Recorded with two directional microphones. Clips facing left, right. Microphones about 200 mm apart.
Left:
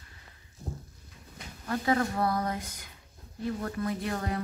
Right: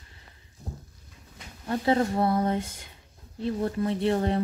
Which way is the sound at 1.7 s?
25° right (ahead or behind).